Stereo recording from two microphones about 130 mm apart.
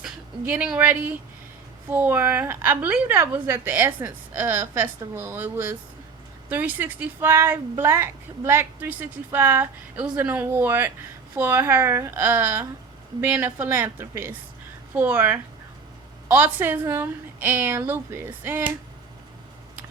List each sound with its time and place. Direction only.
0.4 s speech: 10° right (ahead or behind)